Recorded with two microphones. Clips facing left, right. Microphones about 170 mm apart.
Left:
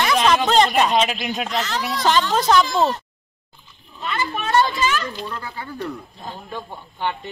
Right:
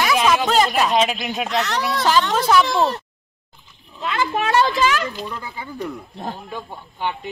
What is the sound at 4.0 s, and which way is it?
A child's voice, 90° right.